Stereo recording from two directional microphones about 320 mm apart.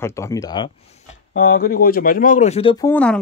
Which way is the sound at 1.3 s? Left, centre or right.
Left.